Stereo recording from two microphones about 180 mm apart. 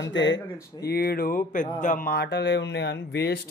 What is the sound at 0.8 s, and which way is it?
Speech, 60° left (ahead or behind).